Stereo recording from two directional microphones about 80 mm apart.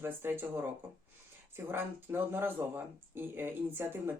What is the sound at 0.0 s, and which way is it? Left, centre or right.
Speech, right.